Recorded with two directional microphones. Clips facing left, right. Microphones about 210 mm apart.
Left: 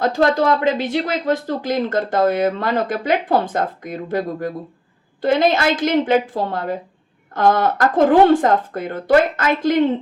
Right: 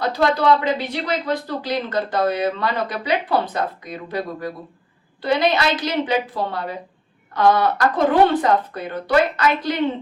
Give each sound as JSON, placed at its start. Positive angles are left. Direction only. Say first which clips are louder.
{"t": 0.0, "sound": "speech", "louder": "left 2 dB", "side_deg": 45}